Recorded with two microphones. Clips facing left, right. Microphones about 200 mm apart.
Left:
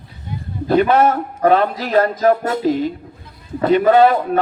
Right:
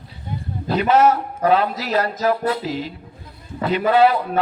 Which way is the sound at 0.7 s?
50° left (ahead or behind).